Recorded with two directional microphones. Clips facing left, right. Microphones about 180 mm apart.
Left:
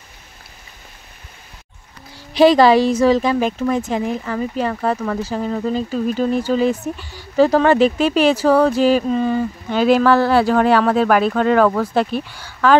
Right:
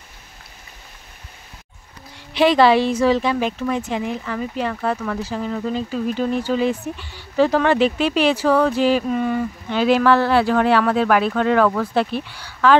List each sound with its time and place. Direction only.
2.1 s speech: 40° left (ahead or behind)
9.0 s speech: 30° left (ahead or behind)
9.7 s speech: 45° left (ahead or behind)